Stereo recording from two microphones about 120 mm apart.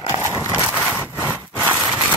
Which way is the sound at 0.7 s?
5° right (ahead or behind).